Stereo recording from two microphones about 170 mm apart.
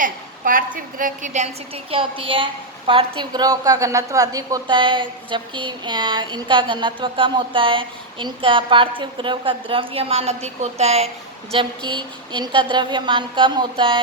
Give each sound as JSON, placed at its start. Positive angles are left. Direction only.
{"t": 0.0, "sound": "a woman's voice", "side_deg": -55}
{"t": 11.5, "sound": "a woman's voice", "side_deg": -25}